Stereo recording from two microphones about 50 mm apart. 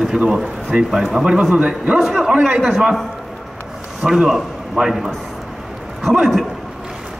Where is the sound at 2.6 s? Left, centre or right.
Centre.